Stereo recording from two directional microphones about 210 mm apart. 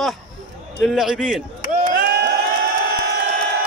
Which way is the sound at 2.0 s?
50° right (ahead or behind).